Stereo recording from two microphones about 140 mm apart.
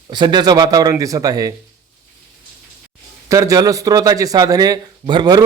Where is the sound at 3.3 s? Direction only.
25° right (ahead or behind).